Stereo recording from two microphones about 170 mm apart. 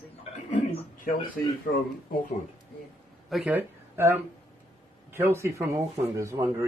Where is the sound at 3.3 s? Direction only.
10° right (ahead or behind).